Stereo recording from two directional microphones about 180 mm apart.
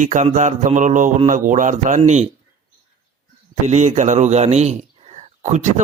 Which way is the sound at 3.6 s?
40° right (ahead or behind).